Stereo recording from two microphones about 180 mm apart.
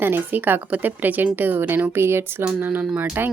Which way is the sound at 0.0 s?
10° right (ahead or behind).